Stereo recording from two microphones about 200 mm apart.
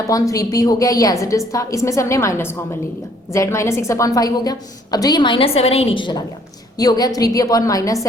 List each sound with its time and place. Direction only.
0.1 s a woman's voice: 15° left (ahead or behind)